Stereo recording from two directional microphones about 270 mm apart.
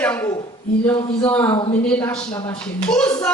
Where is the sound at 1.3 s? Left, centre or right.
Centre.